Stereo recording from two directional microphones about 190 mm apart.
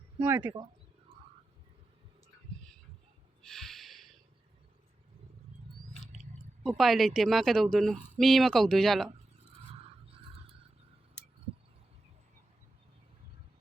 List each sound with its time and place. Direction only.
0.2 s speech: 10° right (ahead or behind)
3.4 s snort: centre (ahead or behind)
6.6 s speech: centre (ahead or behind)